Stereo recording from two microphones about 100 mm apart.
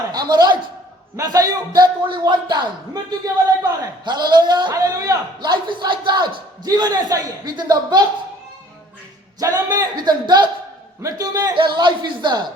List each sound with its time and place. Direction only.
0.1 s a man's voice: 45° right (ahead or behind)
4.7 s a man's voice: 35° right (ahead or behind)
5.4 s a man's voice: 50° right (ahead or behind)
9.4 s a man's voice: 35° right (ahead or behind)
11.5 s a man's voice: 50° right (ahead or behind)